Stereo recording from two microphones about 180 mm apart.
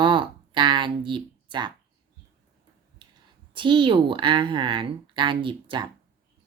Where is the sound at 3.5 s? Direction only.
25° right (ahead or behind).